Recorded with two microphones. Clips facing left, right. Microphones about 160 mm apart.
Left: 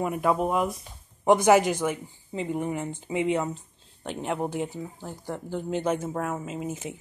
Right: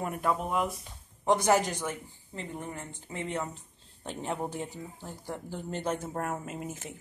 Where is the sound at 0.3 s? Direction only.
20° left (ahead or behind).